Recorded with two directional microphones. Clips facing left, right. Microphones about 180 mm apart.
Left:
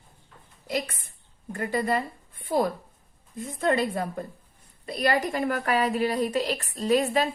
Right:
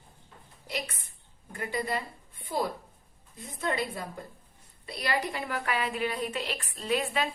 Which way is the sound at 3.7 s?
50° left (ahead or behind).